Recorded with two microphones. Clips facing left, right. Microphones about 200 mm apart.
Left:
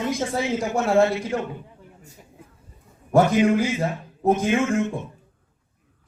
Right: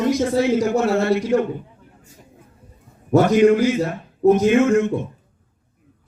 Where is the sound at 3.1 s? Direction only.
55° right (ahead or behind).